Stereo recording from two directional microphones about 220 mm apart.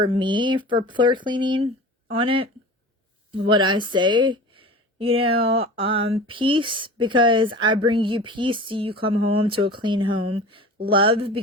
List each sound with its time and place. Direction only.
0.0 s a woman's voice: 20° right (ahead or behind)